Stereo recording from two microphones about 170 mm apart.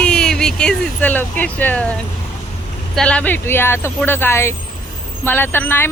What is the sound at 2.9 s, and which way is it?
Speech, 5° left (ahead or behind).